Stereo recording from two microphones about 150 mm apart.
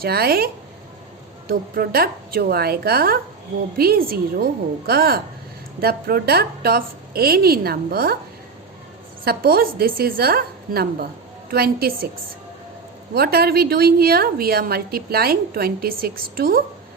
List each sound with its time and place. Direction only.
0.0 s a woman's voice: 90° right
1.5 s a woman's voice: 80° right
9.2 s a woman's voice: 85° right
13.1 s a woman's voice: 90° right